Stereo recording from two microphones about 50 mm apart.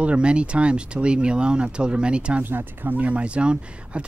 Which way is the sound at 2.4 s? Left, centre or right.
Right.